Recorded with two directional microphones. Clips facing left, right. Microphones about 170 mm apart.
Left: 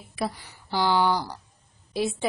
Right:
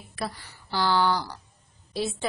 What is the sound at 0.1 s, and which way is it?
A woman's voice, 15° left (ahead or behind).